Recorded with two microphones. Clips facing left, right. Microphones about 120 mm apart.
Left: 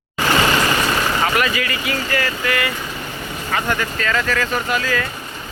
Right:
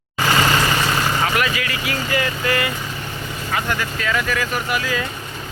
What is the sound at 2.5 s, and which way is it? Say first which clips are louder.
Speech: right 1 dB; 25° right (ahead or behind).